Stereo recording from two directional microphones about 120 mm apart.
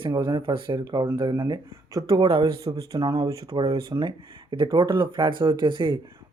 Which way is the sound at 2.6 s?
30° right (ahead or behind).